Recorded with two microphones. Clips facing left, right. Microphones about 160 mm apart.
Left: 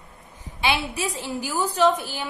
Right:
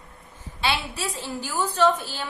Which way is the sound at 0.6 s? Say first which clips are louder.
Left 2 dB; 15° left (ahead or behind).